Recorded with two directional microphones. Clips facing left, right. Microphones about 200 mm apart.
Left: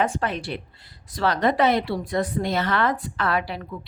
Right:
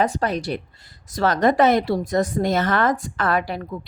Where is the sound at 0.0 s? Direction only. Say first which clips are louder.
Right 3 dB; 40° right (ahead or behind).